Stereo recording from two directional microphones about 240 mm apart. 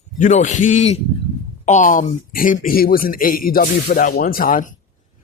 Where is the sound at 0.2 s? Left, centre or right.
Left.